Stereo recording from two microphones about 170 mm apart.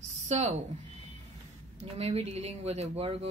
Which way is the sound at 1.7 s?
40° right (ahead or behind).